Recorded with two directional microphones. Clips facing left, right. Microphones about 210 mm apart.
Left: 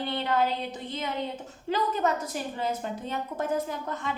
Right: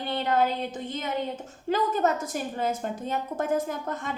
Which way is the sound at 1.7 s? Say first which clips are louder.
Right 2 dB; 45° right (ahead or behind).